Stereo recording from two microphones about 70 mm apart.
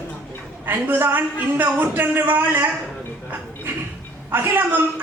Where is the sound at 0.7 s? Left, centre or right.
Right.